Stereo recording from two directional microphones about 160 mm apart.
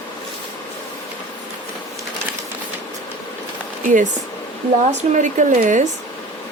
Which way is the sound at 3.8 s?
55° right (ahead or behind).